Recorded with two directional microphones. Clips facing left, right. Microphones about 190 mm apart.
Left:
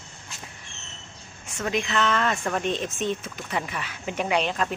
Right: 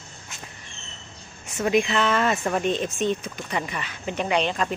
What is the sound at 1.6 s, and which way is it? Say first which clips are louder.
Speech: right 4 dB; 10° right (ahead or behind).